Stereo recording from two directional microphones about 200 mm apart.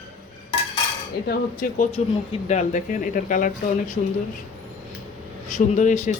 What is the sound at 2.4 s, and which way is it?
Speech, 35° left (ahead or behind).